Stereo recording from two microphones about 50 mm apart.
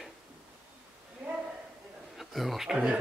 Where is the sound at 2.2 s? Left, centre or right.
Centre.